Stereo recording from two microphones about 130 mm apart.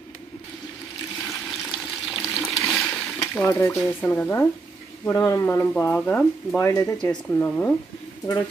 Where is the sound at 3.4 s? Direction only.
20° left (ahead or behind).